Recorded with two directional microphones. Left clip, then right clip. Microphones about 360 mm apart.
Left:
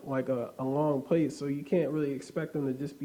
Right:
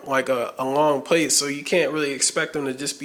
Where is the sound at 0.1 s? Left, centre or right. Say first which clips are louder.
Right 10 dB; centre.